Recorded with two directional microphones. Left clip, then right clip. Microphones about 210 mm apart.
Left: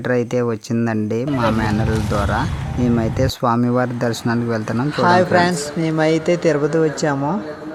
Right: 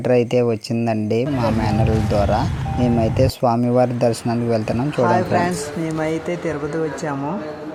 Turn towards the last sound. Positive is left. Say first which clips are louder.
# left 5 dB
turn(degrees=15)  # may be behind; listen again after turning